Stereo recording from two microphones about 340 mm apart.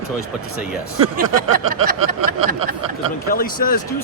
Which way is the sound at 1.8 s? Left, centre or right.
Right.